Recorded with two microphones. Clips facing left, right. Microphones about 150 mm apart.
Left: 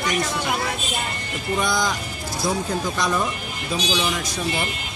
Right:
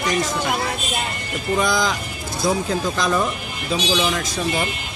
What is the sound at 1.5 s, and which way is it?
Speech, 90° right.